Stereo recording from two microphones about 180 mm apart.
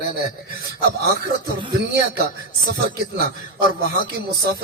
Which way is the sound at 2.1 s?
65° right (ahead or behind).